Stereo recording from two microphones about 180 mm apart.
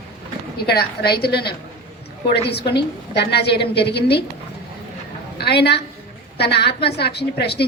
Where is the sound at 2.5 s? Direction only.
65° left (ahead or behind).